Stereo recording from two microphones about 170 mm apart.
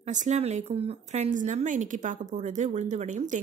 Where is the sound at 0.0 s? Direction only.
45° right (ahead or behind).